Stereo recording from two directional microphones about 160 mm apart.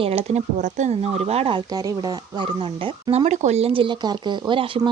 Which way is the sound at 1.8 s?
25° right (ahead or behind).